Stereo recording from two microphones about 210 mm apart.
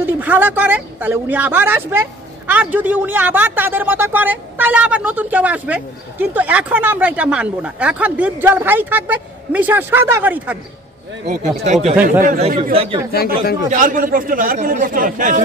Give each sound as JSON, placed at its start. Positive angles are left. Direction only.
{"t": 0.0, "sound": "speech", "side_deg": -10}
{"t": 11.2, "sound": "speech", "side_deg": -40}
{"t": 13.1, "sound": "speech", "side_deg": 45}
{"t": 13.7, "sound": "speech", "side_deg": -40}